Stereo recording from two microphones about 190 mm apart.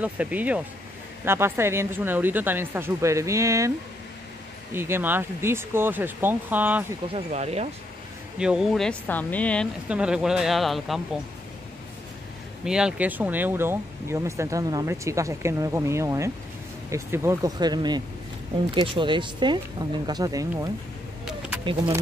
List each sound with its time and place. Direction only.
0.0 s speech: 10° right (ahead or behind)
4.7 s speech: 10° right (ahead or behind)
7.2 s speech: 35° right (ahead or behind)
8.4 s speech: 5° right (ahead or behind)
9.8 s speech: 5° right (ahead or behind)
12.6 s speech: 5° right (ahead or behind); by 20.7 s 20° right (ahead or behind)